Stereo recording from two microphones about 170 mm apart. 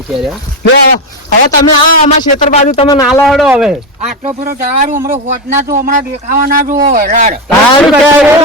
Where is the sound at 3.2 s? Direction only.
Centre (ahead or behind).